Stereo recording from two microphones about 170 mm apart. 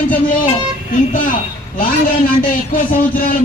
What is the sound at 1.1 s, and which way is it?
Speech, 50° left (ahead or behind).